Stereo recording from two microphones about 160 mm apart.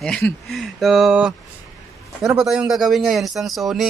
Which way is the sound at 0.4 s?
Centre (ahead or behind).